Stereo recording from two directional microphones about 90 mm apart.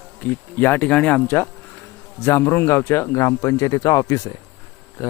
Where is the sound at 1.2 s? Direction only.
25° left (ahead or behind); by 4.3 s 40° left (ahead or behind).